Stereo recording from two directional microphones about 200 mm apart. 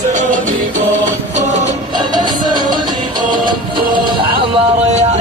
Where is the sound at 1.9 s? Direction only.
20° right (ahead or behind).